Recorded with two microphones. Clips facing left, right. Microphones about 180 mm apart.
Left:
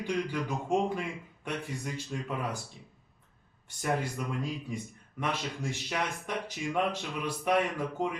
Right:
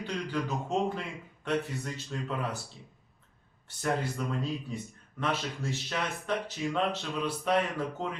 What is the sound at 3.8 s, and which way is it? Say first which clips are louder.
Speech: right 1 dB; 10° left (ahead or behind).